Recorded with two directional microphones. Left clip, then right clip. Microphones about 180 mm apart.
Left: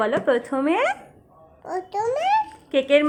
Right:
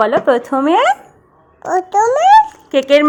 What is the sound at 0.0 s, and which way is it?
A child's voice, 30° right (ahead or behind).